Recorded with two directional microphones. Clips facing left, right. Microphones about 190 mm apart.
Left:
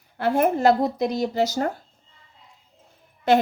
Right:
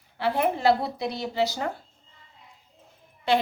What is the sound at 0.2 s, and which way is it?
Speech, 45° left (ahead or behind).